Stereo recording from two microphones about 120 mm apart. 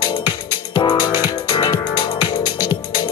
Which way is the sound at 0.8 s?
40° left (ahead or behind).